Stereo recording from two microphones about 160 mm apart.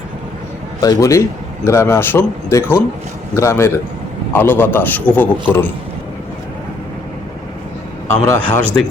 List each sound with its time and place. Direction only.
0.8 s a man's voice: 20° left (ahead or behind)
8.1 s a man's voice: 15° left (ahead or behind)